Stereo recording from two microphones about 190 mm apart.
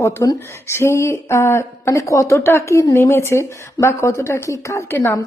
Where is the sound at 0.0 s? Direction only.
15° left (ahead or behind).